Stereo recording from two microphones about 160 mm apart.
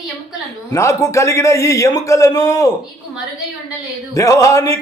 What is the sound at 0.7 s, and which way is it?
Speech, 20° left (ahead or behind).